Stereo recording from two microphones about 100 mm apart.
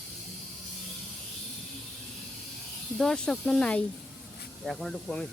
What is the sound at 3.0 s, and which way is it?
Speech, 5° left (ahead or behind).